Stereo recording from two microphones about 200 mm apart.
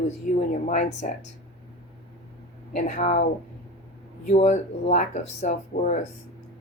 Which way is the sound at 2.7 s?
35° left (ahead or behind).